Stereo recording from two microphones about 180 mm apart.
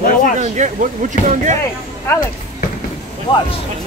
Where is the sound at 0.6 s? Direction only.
40° right (ahead or behind).